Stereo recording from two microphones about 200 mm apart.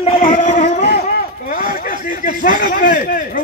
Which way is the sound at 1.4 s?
45° left (ahead or behind).